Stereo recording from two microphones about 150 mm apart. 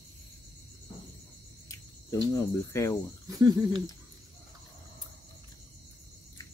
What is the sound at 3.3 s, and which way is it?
Speech, 25° right (ahead or behind).